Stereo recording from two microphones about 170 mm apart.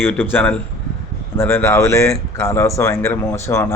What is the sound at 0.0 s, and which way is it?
Speech, 10° left (ahead or behind).